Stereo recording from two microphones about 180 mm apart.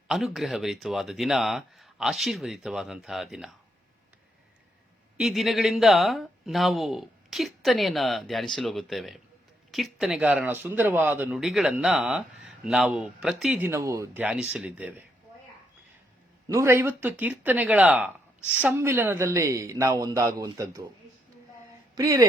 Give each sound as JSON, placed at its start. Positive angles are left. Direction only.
{"t": 0.1, "sound": "speech", "side_deg": 0}
{"t": 5.1, "sound": "speech", "side_deg": 0}
{"t": 16.5, "sound": "speech", "side_deg": -15}
{"t": 21.9, "sound": "speech", "side_deg": -20}